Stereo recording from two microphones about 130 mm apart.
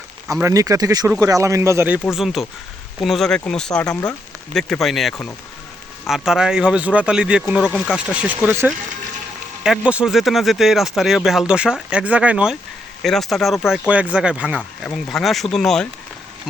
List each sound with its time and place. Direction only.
0.4 s a man's voice: 25° right (ahead or behind)
2.1 s speech: centre (ahead or behind)
13.0 s speech: centre (ahead or behind)
14.9 s speech: centre (ahead or behind)